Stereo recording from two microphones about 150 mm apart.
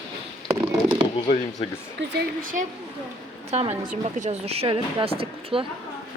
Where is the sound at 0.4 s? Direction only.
35° right (ahead or behind).